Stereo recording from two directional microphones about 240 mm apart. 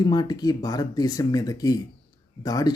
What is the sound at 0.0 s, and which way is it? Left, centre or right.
Speech, centre.